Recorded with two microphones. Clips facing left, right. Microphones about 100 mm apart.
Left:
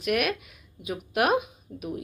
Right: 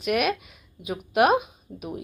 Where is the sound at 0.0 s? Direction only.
20° right (ahead or behind).